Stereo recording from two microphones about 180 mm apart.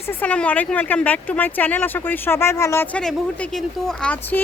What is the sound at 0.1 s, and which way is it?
Speech, 10° left (ahead or behind).